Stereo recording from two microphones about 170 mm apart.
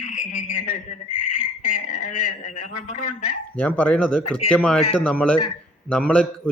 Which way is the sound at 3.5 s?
10° left (ahead or behind).